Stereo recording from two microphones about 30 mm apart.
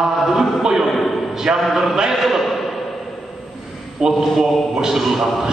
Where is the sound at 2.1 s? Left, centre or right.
Centre.